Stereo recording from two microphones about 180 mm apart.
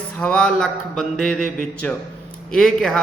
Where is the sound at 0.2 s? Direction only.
5° left (ahead or behind).